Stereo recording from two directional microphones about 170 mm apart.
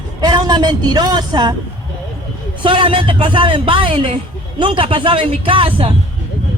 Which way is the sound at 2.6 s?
30° right (ahead or behind).